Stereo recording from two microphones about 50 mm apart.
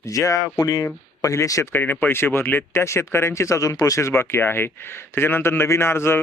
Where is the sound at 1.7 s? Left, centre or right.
Left.